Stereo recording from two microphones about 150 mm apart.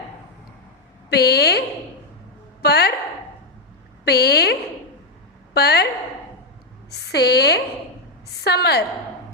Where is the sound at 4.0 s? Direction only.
90° left.